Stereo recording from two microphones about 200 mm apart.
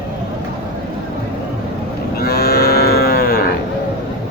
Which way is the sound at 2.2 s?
50° left (ahead or behind).